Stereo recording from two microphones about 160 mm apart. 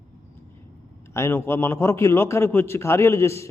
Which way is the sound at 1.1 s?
15° left (ahead or behind).